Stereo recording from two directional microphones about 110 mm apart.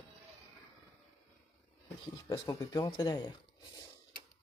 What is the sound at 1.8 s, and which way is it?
Speech, 30° left (ahead or behind).